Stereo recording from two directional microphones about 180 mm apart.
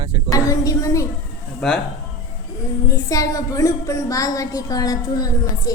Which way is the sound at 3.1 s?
20° left (ahead or behind).